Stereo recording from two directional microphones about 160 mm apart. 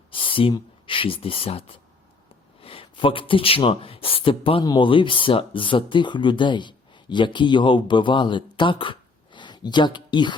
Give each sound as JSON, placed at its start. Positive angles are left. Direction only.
{"t": 0.1, "sound": "speech", "side_deg": 35}